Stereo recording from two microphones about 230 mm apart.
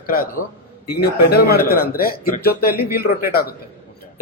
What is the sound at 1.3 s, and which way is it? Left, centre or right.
A man's voice, left.